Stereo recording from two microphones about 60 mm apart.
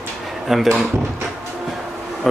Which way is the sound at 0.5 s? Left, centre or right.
Centre.